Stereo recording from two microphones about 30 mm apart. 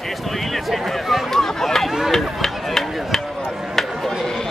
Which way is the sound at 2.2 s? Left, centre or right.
Centre.